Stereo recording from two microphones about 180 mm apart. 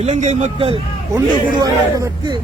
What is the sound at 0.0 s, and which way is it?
Speech, 40° right (ahead or behind).